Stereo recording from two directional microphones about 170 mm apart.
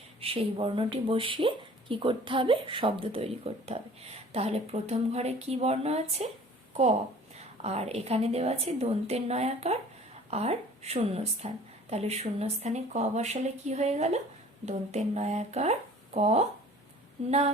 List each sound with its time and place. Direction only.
0.2 s a woman's voice: 35° right (ahead or behind)
7.3 s a woman's voice: 40° right (ahead or behind)